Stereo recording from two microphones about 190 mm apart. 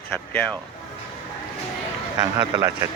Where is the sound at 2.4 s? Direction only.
20° right (ahead or behind).